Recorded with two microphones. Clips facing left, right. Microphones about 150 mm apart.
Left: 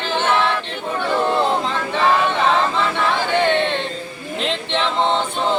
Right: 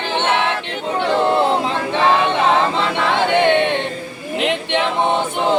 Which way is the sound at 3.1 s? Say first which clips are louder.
Right 5 dB; 15° right (ahead or behind).